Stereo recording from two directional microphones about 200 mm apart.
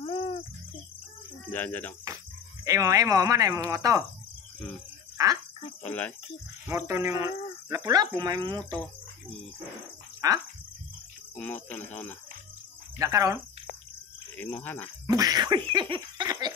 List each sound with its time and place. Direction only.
0.0 s cricket: 30° left (ahead or behind)
1.5 s speech: 10° left (ahead or behind)
2.6 s speech: 15° right (ahead or behind)
5.1 s a sound: 15° right (ahead or behind)
5.9 s speech: 10° left (ahead or behind)
6.7 s speech: 15° right (ahead or behind)
10.2 s speech: 15° right (ahead or behind)
11.3 s speech: 10° left (ahead or behind)
13.0 s speech: 15° right (ahead or behind)
14.3 s speech: 10° left (ahead or behind)
15.0 s speech: 20° right (ahead or behind)